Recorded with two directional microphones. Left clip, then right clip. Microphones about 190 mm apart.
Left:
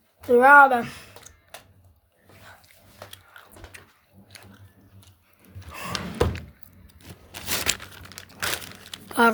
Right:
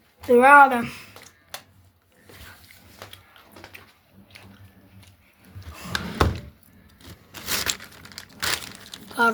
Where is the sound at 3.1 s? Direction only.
30° left (ahead or behind).